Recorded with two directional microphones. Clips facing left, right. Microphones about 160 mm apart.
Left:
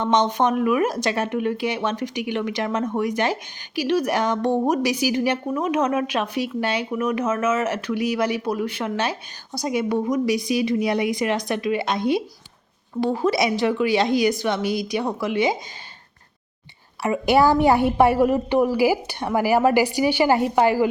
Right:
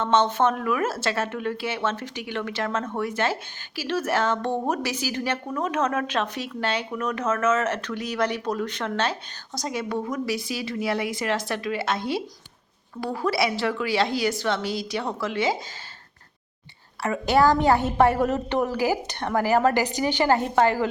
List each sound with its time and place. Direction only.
0.0 s a woman's voice: 15° left (ahead or behind)
17.0 s a woman's voice: 15° left (ahead or behind)